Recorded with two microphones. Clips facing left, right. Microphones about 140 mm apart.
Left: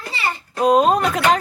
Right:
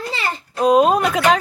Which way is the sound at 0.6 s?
Centre (ahead or behind).